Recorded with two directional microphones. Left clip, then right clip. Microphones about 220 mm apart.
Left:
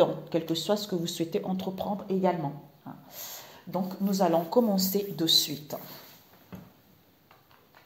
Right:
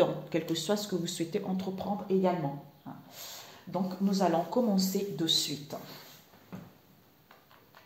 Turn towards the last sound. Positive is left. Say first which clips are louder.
# left 2 dB
turn(degrees=45)  # may be behind; listen again after turning